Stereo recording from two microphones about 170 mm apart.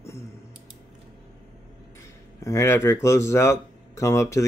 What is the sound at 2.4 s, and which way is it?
Speech, 15° left (ahead or behind).